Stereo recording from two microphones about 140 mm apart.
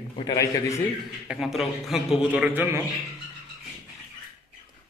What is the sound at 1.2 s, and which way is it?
A man's voice, centre (ahead or behind).